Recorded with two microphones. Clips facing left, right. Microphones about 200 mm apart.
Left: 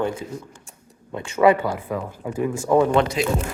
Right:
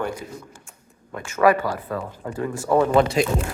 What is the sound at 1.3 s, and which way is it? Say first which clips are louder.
A man's voice: left 1 dB; 25° left (ahead or behind).